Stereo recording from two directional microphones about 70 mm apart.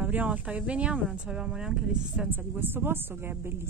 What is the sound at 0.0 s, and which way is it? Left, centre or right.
Speech, right.